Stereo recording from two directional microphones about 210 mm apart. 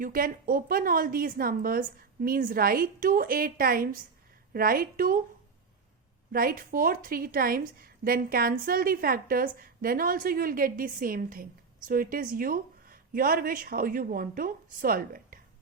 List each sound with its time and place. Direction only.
0.0 s a woman's voice: 45° right (ahead or behind)
6.3 s a woman's voice: 45° right (ahead or behind)